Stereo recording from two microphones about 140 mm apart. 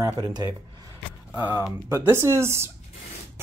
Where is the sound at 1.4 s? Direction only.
15° left (ahead or behind).